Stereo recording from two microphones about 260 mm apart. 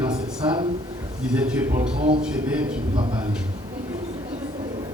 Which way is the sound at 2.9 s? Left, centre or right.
Centre.